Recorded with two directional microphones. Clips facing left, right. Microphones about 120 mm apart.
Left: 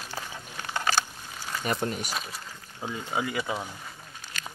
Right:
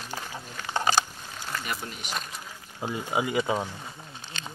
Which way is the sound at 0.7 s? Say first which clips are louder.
Right 3 dB; 25° right (ahead or behind).